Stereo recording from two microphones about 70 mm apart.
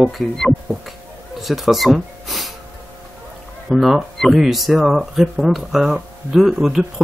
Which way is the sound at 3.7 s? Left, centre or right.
Centre.